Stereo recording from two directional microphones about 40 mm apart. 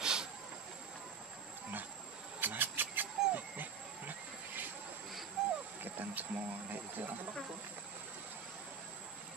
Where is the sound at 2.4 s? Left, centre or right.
Right.